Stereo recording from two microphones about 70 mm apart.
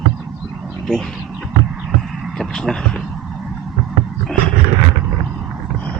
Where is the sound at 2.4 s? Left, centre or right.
Centre.